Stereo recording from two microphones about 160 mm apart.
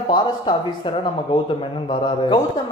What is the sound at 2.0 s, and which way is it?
Speech, 30° left (ahead or behind).